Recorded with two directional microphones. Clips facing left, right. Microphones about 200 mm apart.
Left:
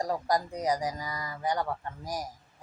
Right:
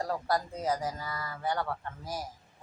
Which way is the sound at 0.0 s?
15° left (ahead or behind).